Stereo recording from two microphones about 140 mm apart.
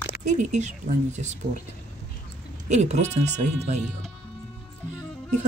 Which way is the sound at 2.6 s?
55° right (ahead or behind).